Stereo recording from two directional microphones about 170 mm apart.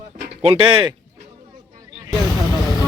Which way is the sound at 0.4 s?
30° right (ahead or behind).